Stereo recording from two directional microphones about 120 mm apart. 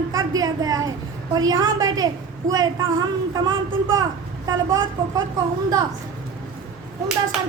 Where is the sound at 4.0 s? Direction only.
30° right (ahead or behind).